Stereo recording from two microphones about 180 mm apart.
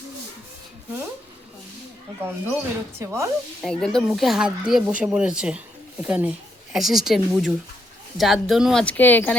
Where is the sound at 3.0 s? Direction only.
15° right (ahead or behind).